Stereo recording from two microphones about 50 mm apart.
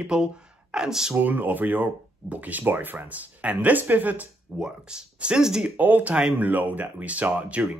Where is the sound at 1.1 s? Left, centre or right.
Right.